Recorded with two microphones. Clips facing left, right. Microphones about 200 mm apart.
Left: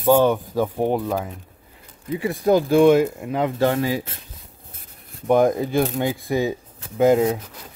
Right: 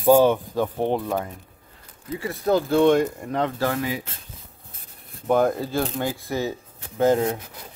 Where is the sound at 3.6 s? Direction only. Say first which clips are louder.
Left 5 dB; 30° left (ahead or behind).